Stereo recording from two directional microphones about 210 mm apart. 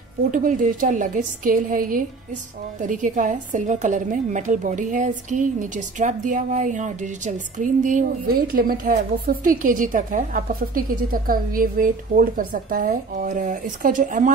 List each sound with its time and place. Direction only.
0.3 s a woman's voice: 40° right (ahead or behind)